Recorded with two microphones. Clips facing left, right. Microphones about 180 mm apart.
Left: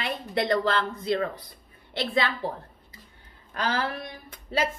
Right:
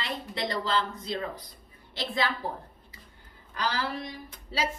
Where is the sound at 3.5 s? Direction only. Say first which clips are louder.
Left 3 dB; 55° left (ahead or behind).